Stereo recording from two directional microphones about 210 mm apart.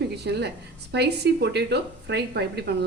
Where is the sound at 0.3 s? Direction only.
55° right (ahead or behind).